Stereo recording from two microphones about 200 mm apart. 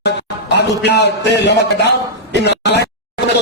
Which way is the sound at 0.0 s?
60° left (ahead or behind).